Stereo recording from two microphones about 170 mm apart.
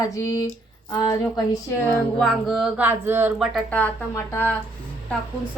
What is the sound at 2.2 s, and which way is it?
Speech, centre (ahead or behind).